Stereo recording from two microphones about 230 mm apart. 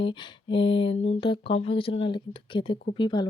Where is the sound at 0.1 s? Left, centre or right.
Left.